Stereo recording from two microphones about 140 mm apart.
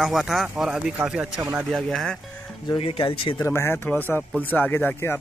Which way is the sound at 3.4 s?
15° left (ahead or behind).